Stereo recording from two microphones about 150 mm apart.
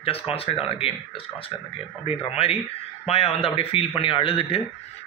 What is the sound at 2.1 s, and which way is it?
A man's voice, 40° left (ahead or behind).